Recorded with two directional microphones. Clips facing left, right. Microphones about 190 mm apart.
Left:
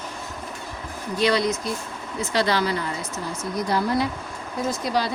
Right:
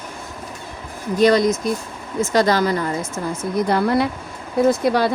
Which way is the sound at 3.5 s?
60° right (ahead or behind).